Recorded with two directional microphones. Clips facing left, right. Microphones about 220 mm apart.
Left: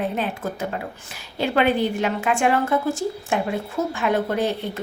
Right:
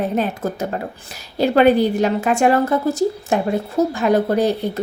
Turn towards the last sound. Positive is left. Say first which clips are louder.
# right 6 dB
turn(degrees=-40)  # may be behind; listen again after turning